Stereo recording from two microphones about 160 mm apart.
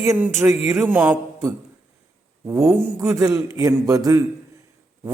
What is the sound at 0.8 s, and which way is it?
Mantra, 10° right (ahead or behind).